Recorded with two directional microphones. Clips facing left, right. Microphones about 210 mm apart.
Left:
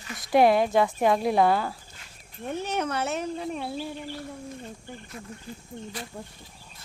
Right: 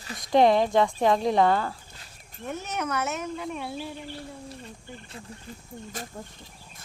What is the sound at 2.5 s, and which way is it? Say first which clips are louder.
Speech: left 2 dB; 30° left (ahead or behind).